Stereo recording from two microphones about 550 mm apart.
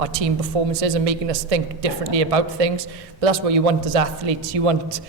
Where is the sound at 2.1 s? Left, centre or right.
Right.